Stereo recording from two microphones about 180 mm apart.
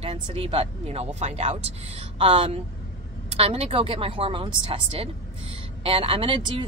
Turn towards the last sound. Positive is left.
turn(degrees=-30)  # may be behind; listen again after turning